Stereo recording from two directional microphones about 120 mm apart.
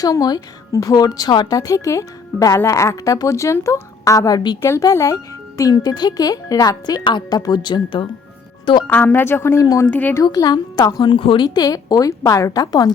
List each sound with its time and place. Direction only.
0.0 s a woman's voice: 30° left (ahead or behind)
8.9 s a woman's voice: 15° left (ahead or behind)
9.8 s speech: 15° left (ahead or behind)
10.2 s speech: 35° left (ahead or behind)